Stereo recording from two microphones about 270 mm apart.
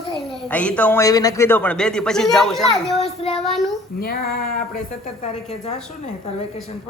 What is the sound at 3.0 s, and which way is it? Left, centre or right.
Speech, left.